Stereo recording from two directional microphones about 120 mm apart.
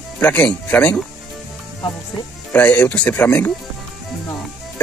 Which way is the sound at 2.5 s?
15° left (ahead or behind).